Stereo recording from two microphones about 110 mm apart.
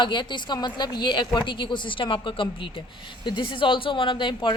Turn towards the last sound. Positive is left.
turn(degrees=45)  # may be behind; listen again after turning